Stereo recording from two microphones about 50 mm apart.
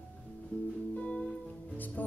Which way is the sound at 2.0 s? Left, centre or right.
Left.